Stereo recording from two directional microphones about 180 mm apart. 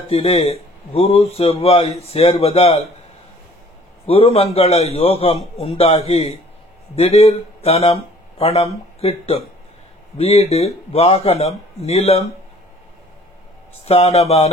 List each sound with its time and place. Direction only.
0.1 s a man's voice: 30° left (ahead or behind)
4.0 s a man's voice: 30° left (ahead or behind)
13.8 s a man's voice: 35° left (ahead or behind)